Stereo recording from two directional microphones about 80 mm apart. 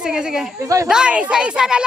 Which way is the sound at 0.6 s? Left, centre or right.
Right.